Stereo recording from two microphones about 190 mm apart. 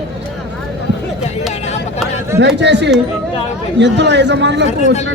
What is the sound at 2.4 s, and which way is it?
A man's voice, 65° right (ahead or behind).